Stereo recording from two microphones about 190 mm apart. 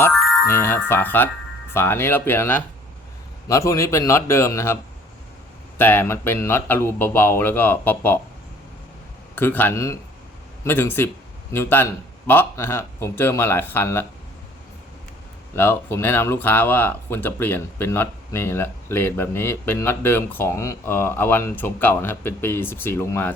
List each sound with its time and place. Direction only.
0.4 s speech: 15° left (ahead or behind)
9.3 s speech: 10° left (ahead or behind)
15.5 s speech: 10° left (ahead or behind)